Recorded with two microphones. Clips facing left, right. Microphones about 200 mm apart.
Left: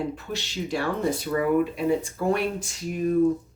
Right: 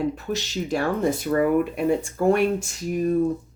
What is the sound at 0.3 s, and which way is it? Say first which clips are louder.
Speech: right 3 dB; 40° right (ahead or behind).